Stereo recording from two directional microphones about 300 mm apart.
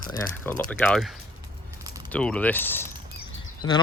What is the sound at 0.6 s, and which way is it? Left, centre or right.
Speech, centre.